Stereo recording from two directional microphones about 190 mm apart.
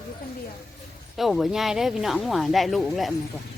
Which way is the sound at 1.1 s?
Centre (ahead or behind).